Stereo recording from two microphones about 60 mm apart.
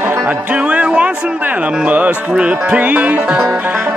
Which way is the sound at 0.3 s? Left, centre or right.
Right.